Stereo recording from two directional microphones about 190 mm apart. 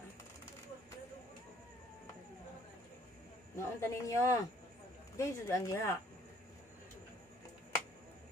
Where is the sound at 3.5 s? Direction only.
15° left (ahead or behind).